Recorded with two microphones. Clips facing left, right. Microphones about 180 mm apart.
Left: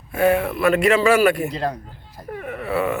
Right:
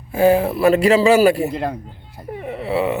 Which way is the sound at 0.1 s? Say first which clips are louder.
Right 4 dB; 30° right (ahead or behind).